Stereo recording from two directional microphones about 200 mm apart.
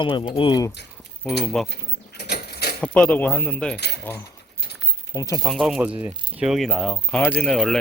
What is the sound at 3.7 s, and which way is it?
Keys jangling, 55° left (ahead or behind).